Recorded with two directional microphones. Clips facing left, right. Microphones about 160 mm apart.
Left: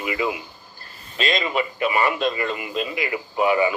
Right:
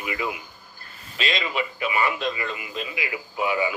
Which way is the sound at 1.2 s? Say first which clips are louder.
Left 4 dB; 45° left (ahead or behind).